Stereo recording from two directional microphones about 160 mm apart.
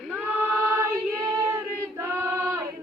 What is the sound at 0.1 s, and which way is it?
Choir, 10° right (ahead or behind).